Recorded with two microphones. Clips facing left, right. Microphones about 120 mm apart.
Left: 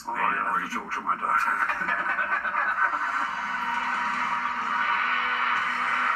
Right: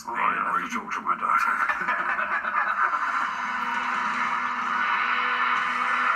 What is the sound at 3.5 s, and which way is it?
Music, 30° right (ahead or behind).